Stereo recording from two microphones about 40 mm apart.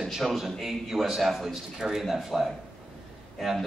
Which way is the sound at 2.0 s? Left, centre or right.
Centre.